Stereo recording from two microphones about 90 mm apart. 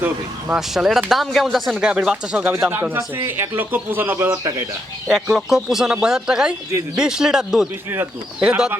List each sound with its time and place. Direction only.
0.5 s speech: 5° right (ahead or behind)
2.3 s speech: 20° right (ahead or behind)
5.0 s speech: 5° right (ahead or behind)